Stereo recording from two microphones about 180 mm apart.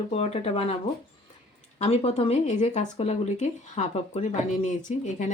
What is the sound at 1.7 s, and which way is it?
Speech, 35° left (ahead or behind).